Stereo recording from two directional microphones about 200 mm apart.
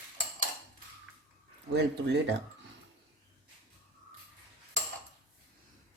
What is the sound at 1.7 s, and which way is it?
Speech, 60° right (ahead or behind).